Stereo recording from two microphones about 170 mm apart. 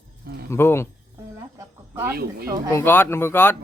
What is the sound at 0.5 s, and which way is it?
Speech, 15° left (ahead or behind).